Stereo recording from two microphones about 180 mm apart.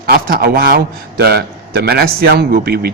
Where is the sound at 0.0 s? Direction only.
55° right (ahead or behind).